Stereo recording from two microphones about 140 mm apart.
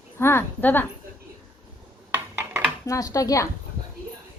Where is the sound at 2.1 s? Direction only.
10° right (ahead or behind).